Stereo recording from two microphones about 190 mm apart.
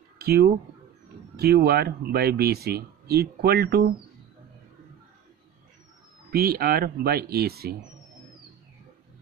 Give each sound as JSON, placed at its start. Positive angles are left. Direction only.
{"t": 0.2, "sound": "speech", "side_deg": -55}
{"t": 6.3, "sound": "speech", "side_deg": -55}